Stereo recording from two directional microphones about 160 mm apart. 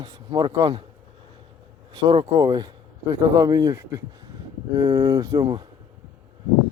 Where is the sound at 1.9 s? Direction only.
30° right (ahead or behind).